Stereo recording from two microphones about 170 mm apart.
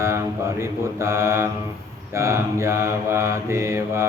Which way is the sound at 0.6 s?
15° right (ahead or behind).